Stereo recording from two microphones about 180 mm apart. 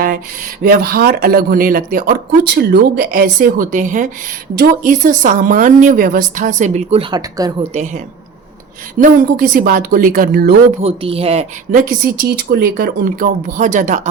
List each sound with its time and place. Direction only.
0.0 s speech: 50° right (ahead or behind)
7.1 s a woman's voice: 20° right (ahead or behind)
7.6 s speech: 40° right (ahead or behind)
10.8 s speech: 35° right (ahead or behind)
12.4 s speech: 55° right (ahead or behind)